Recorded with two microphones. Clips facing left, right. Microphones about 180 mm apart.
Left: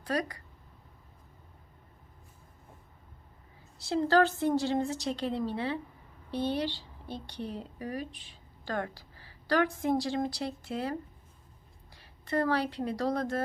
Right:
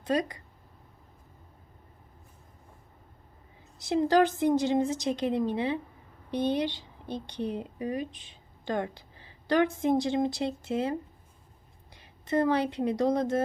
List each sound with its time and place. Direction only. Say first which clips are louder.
0.0 s speech: right 4 dB; 20° right (ahead or behind)
3.8 s a woman's voice: right 2 dB; 15° right (ahead or behind)
11.9 s speech: right 3 dB; 20° right (ahead or behind)